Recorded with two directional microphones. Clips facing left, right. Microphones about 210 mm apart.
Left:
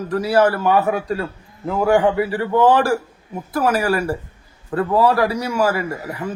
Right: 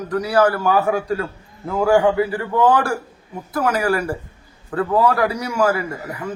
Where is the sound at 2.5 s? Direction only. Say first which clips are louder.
Left 3 dB; 25° left (ahead or behind).